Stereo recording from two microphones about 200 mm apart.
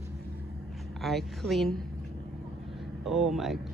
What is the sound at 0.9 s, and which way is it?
Speech, centre (ahead or behind).